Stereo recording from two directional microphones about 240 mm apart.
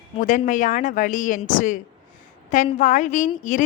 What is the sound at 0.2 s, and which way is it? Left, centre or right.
A woman's voice, left.